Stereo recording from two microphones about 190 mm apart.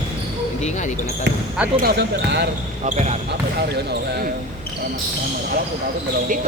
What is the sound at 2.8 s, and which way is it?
Speech, 35° right (ahead or behind).